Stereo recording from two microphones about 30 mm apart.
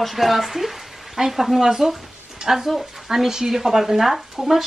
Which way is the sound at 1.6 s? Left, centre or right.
Centre.